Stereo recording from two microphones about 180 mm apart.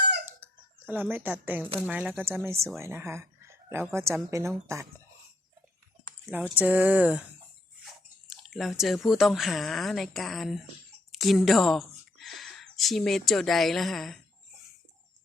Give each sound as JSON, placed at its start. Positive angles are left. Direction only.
{"t": 0.3, "sound": "chicken", "side_deg": -15}
{"t": 1.9, "sound": "a woman's voice", "side_deg": -10}
{"t": 6.3, "sound": "speech", "side_deg": -10}